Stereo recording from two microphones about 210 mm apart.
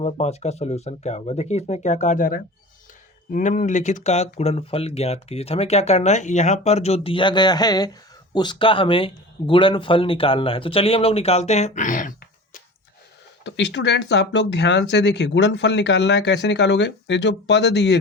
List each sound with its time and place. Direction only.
0.0 s speech: 30° left (ahead or behind)
13.4 s speech: 55° left (ahead or behind)